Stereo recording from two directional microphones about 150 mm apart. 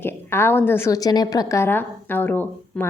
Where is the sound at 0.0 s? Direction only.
15° left (ahead or behind).